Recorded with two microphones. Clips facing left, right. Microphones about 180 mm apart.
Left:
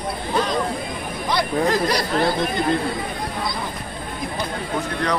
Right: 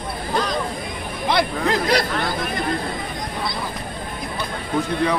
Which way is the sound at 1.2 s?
60° right (ahead or behind).